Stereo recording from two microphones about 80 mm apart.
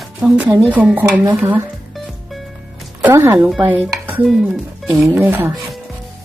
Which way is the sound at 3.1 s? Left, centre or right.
Right.